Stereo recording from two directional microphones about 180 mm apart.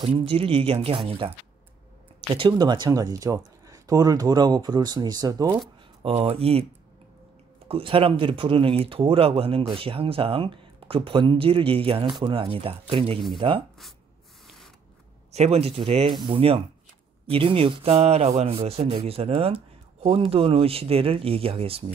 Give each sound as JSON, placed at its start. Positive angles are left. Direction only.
{"t": 0.0, "sound": "speech", "side_deg": -30}
{"t": 2.3, "sound": "speech", "side_deg": -25}
{"t": 6.0, "sound": "speech", "side_deg": -35}
{"t": 7.6, "sound": "speech", "side_deg": -30}
{"t": 15.3, "sound": "speech", "side_deg": -35}